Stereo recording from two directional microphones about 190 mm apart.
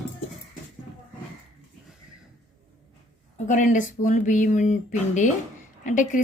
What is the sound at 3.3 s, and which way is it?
A woman's voice, 40° left (ahead or behind).